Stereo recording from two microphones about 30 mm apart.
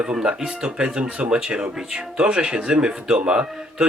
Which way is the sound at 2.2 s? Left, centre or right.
Right.